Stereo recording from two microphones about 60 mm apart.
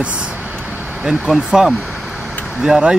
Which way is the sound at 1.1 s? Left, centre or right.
Centre.